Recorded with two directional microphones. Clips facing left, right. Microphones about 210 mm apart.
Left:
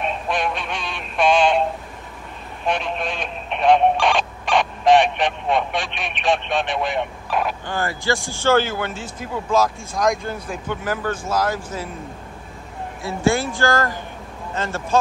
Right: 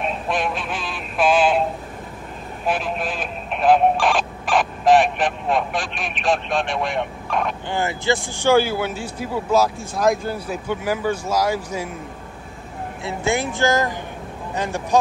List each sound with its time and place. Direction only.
0.0 s synthetic singing: centre (ahead or behind)
2.6 s speech: 5° right (ahead or behind)
7.6 s speech: 20° right (ahead or behind)
13.0 s speech: 20° right (ahead or behind)